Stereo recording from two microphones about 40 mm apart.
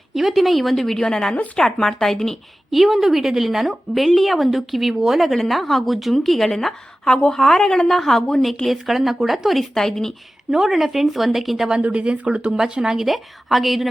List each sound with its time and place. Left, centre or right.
0.1 s a woman's voice: centre
2.6 s a woman's voice: centre
8.6 s a woman's voice: centre
9.7 s speech: centre
10.5 s a woman's voice: centre
11.8 s speech: right
12.5 s speech: centre
13.0 s a woman's voice: centre